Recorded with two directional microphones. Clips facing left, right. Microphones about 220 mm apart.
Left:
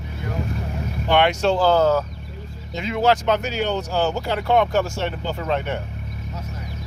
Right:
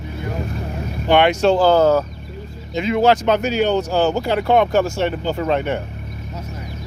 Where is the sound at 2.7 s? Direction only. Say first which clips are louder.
Right 4 dB; 15° right (ahead or behind).